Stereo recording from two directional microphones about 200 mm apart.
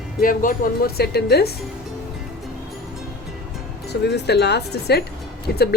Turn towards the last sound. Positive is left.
turn(degrees=50)  # may be behind; listen again after turning